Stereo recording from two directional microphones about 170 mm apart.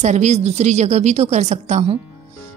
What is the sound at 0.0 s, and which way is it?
A woman's voice, 45° right (ahead or behind).